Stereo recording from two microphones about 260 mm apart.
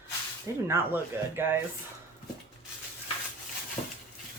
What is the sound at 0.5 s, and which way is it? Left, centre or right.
Speech, centre.